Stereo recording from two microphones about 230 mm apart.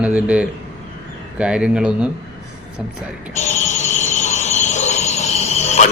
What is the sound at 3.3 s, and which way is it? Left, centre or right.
Squeal, left.